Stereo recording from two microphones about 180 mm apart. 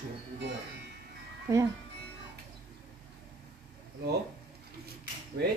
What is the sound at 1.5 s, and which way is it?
Speech, 20° right (ahead or behind).